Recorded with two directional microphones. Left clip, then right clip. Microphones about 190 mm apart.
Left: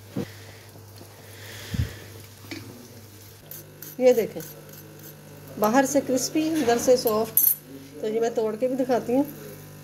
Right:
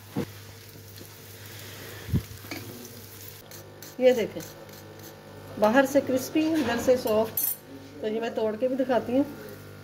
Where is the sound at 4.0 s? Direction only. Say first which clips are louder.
Left 2 dB; 25° left (ahead or behind).